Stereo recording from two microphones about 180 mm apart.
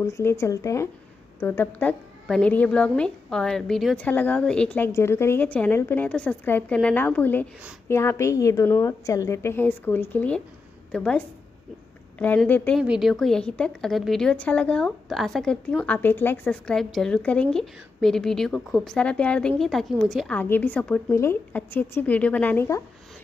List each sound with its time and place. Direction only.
0.0 s a woman's voice: 15° left (ahead or behind)
12.8 s a woman's voice: 5° right (ahead or behind); by 22.8 s 15° left (ahead or behind)